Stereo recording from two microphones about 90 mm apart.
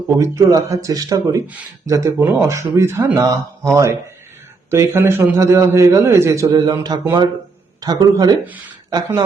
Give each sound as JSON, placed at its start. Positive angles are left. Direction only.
{"t": 0.2, "sound": "speech", "side_deg": -35}
{"t": 6.5, "sound": "a man's voice", "side_deg": -50}